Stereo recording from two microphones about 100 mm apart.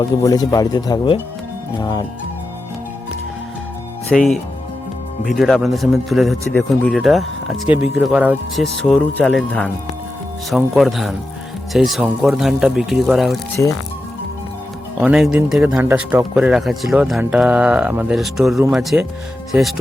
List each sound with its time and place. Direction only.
0.0 s speech: 35° left (ahead or behind)
4.1 s speech: 5° left (ahead or behind)
8.1 s speech: 15° right (ahead or behind)
8.5 s speech: 5° left (ahead or behind)
9.0 s speech: 15° left (ahead or behind)
10.8 s speech: centre (ahead or behind)
15.0 s speech: 10° right (ahead or behind)
15.6 s speech: 20° right (ahead or behind)
16.3 s speech: 10° right (ahead or behind)
18.1 s speech: 5° right (ahead or behind)